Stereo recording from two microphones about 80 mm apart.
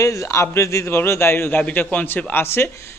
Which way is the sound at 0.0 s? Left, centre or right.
Left.